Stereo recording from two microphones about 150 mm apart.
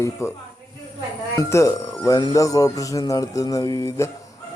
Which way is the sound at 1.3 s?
20° left (ahead or behind).